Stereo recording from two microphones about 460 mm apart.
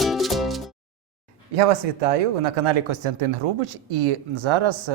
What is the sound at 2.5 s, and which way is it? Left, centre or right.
Speech, right.